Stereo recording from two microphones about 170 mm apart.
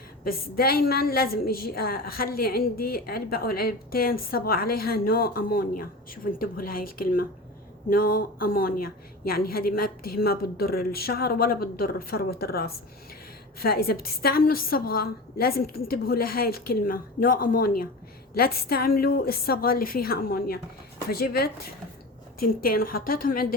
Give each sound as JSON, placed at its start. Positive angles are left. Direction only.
{"t": 0.3, "sound": "a woman's voice", "side_deg": 60}
{"t": 22.6, "sound": "a woman's voice", "side_deg": 60}